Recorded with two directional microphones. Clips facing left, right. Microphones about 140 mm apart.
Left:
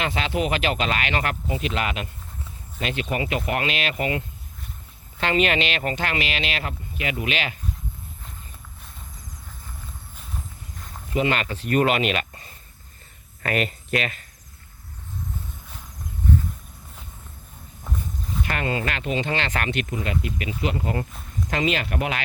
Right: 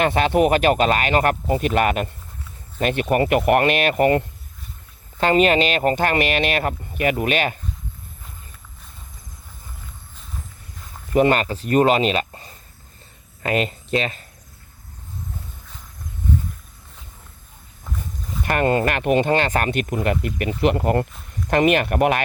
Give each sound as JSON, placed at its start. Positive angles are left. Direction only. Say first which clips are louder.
{"t": 0.0, "sound": "speech", "louder": "right 8 dB", "side_deg": -50}
{"t": 5.2, "sound": "speech", "louder": "right 6 dB", "side_deg": -40}
{"t": 11.1, "sound": "speech", "louder": "right 7 dB", "side_deg": -45}
{"t": 18.4, "sound": "speech", "louder": "right 9 dB", "side_deg": -50}
{"t": 19.9, "sound": "speech", "louder": "right 5 dB", "side_deg": -60}